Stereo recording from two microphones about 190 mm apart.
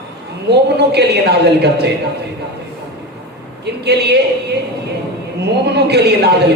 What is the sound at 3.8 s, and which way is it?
Speech, 60° right (ahead or behind).